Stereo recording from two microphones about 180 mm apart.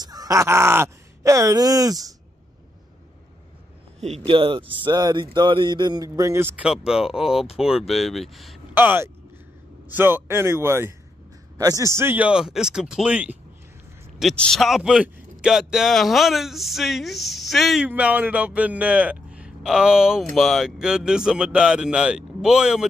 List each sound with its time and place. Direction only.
0.0 s speech: 20° right (ahead or behind)
4.3 s a man's voice: 30° right (ahead or behind); by 8.5 s centre (ahead or behind)
8.7 s speech: 10° right (ahead or behind)
14.2 s a man's voice: 5° left (ahead or behind)